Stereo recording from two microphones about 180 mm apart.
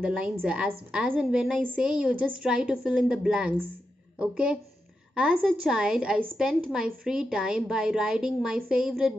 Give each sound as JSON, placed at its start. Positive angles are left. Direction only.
{"t": 0.0, "sound": "a woman's voice", "side_deg": -5}